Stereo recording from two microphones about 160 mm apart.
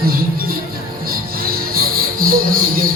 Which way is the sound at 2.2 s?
65° right (ahead or behind).